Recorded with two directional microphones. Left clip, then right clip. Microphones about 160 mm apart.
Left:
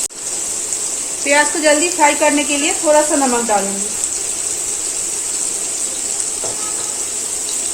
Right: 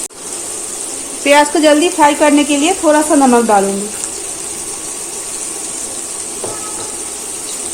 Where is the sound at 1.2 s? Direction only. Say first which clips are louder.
Right 5 dB; 65° right (ahead or behind).